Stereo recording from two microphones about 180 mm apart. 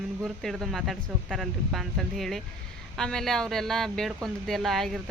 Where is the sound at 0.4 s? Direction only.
Centre (ahead or behind).